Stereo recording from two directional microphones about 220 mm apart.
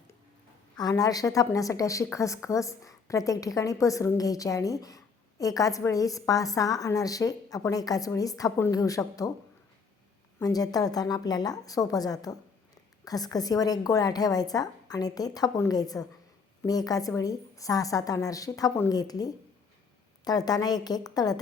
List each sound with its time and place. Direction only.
0.8 s a woman's voice: 15° left (ahead or behind)
10.4 s a woman's voice: 15° left (ahead or behind)